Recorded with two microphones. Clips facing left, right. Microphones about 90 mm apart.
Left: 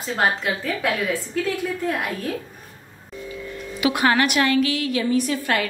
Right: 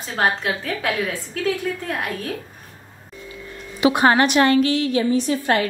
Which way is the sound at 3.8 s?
25° right (ahead or behind).